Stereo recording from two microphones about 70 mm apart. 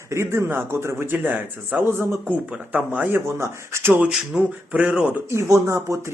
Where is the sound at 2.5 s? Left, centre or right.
Centre.